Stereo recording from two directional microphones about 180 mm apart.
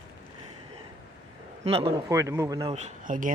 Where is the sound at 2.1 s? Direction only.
15° right (ahead or behind).